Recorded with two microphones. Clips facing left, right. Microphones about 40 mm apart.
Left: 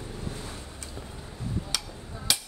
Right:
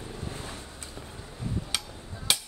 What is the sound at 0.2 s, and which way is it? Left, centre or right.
Vehicle, right.